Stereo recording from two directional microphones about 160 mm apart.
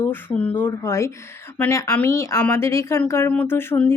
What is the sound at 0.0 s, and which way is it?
A woman's voice, 10° left (ahead or behind).